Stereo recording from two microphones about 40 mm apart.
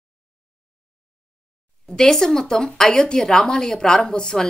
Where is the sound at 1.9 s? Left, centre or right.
Centre.